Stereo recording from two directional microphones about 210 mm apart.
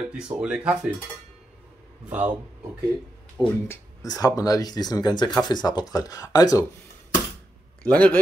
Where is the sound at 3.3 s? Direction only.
10° left (ahead or behind).